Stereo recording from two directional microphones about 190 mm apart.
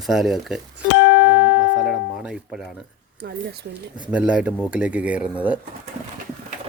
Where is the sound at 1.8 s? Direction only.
5° right (ahead or behind).